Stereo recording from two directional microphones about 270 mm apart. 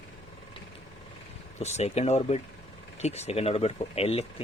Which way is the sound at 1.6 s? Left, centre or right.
Left.